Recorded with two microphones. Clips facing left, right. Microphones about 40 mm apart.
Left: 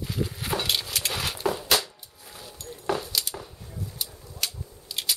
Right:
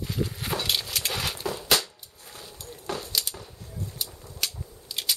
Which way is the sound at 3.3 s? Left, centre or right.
Centre.